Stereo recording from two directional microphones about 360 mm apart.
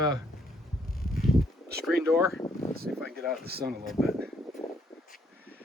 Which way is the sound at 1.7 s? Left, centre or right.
Centre.